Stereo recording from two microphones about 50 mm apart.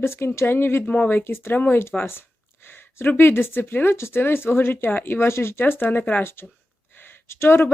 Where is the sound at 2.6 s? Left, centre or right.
Left.